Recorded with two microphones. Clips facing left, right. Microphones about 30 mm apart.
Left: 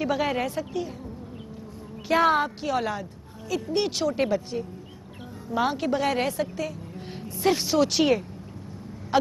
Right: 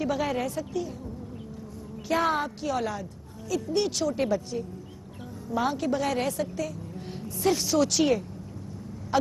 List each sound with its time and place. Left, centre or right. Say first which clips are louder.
0.0 s a woman's voice: left 2 dB; left
2.0 s a woman's voice: left 5 dB; left
9.1 s a sound: left 2 dB; left